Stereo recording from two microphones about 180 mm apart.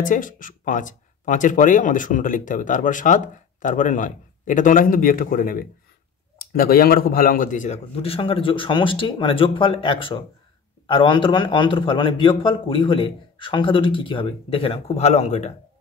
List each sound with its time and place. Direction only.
0.0 s a man's voice: 45° left (ahead or behind)